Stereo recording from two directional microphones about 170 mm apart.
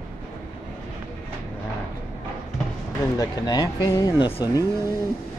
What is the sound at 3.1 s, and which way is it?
Speech, 25° left (ahead or behind).